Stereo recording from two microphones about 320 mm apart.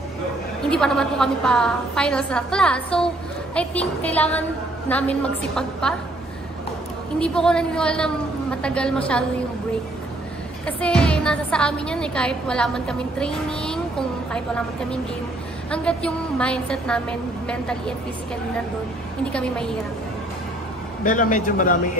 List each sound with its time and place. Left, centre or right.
0.7 s a woman's voice: centre
7.2 s a woman's voice: centre
10.8 s a woman's voice: centre
19.3 s a woman's voice: centre
21.0 s a man's voice: left